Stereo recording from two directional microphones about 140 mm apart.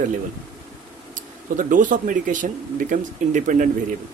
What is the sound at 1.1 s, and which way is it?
Speech, 70° right (ahead or behind).